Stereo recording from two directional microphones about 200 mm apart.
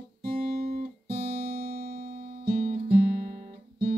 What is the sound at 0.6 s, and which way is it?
Guitar, 45° right (ahead or behind).